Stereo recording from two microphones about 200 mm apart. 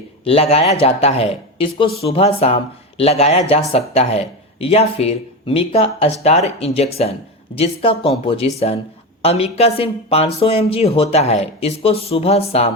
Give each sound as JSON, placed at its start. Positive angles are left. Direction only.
{"t": 0.3, "sound": "speech", "side_deg": 30}